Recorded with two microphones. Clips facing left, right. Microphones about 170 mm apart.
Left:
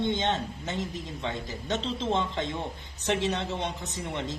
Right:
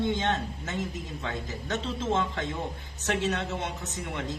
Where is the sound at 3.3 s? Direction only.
35° left (ahead or behind).